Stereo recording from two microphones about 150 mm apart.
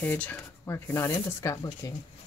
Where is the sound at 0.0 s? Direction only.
10° left (ahead or behind).